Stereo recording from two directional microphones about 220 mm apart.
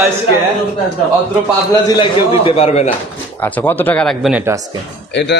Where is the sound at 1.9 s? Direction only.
25° left (ahead or behind).